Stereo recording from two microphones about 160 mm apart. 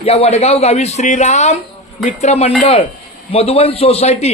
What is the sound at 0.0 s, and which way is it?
A man's voice, 40° left (ahead or behind).